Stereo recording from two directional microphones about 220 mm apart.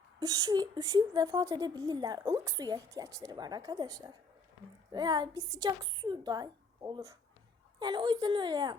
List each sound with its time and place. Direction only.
0.2 s a woman's voice: 15° right (ahead or behind)